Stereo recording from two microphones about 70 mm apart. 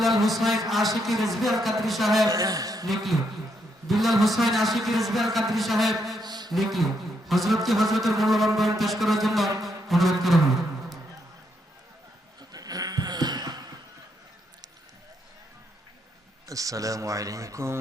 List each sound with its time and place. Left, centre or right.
0.0 s a man's voice: centre
2.3 s speech: right
2.8 s a man's voice: centre
6.2 s a sound: right
6.5 s a man's voice: centre
9.6 s music: centre
12.4 s a sound: right
16.5 s speech: right